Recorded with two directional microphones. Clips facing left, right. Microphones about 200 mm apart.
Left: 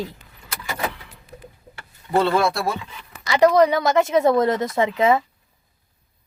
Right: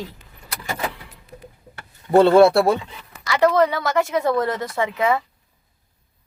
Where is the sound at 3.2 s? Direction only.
20° left (ahead or behind).